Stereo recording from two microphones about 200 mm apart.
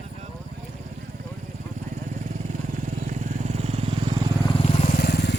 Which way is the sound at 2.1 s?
40° right (ahead or behind).